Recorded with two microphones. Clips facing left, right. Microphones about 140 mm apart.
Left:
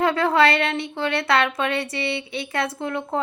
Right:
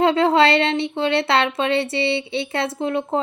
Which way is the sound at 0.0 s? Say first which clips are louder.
Right 3 dB; 25° right (ahead or behind).